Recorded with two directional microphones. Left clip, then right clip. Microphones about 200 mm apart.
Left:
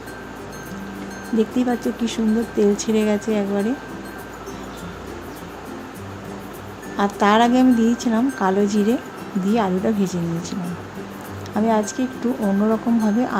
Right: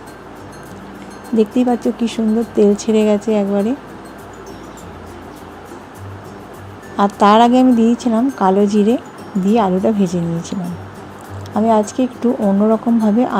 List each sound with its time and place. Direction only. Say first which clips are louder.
1.4 s speech: right 6 dB; 20° right (ahead or behind)
6.9 s a woman's voice: right 6 dB; 20° right (ahead or behind)